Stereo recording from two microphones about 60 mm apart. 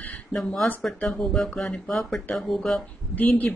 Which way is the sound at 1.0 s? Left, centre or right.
Centre.